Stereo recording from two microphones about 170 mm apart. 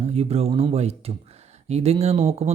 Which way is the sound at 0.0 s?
40° right (ahead or behind).